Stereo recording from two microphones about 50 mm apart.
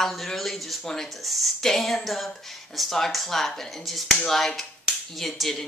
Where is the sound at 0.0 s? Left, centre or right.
Centre.